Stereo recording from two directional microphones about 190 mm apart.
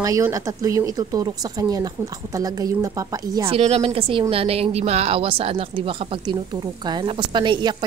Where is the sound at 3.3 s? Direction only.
30° right (ahead or behind).